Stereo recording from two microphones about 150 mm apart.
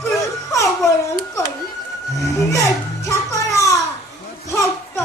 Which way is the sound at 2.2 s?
20° left (ahead or behind).